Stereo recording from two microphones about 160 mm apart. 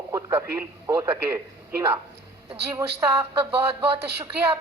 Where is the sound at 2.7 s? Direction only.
20° right (ahead or behind).